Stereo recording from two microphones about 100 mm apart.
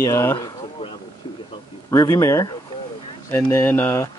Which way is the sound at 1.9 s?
35° left (ahead or behind).